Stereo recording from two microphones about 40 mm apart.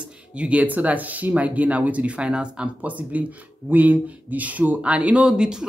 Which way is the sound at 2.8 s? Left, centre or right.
Right.